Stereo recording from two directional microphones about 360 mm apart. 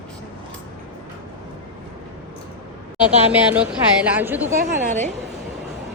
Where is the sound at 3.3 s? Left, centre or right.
Centre.